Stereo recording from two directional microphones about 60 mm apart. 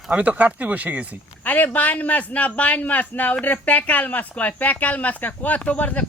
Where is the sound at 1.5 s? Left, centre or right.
Left.